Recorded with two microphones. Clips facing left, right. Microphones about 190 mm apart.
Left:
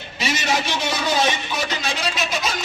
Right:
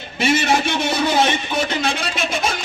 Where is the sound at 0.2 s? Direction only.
55° right (ahead or behind).